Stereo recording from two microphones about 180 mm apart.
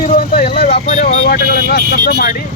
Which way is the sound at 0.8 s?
40° left (ahead or behind).